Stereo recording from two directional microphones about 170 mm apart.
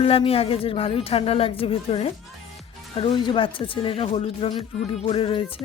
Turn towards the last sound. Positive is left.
turn(degrees=30)  # may be behind; listen again after turning